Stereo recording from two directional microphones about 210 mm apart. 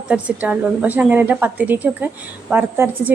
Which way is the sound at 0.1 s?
5° right (ahead or behind).